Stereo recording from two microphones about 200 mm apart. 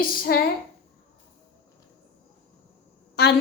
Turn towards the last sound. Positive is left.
turn(degrees=55)  # may be behind; listen again after turning